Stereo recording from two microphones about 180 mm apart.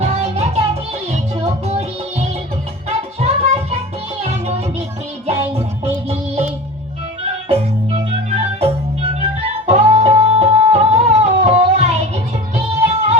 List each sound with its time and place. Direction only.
0.0 s music: 35° right (ahead or behind)
3.2 s music: 35° right (ahead or behind)
6.1 s music: 35° right (ahead or behind)